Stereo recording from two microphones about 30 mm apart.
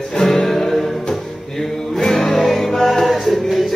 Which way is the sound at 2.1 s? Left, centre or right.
Centre.